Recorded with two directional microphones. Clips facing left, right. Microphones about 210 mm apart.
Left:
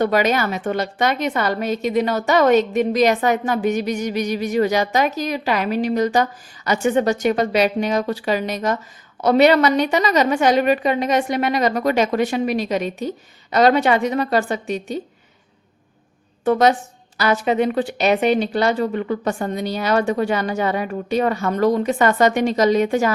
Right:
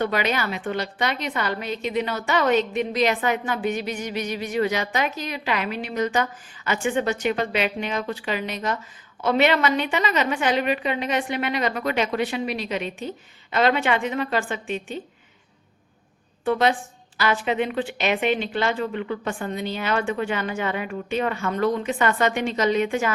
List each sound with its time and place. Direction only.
0.0 s a woman's voice: 45° left (ahead or behind)
16.4 s a woman's voice: 45° left (ahead or behind)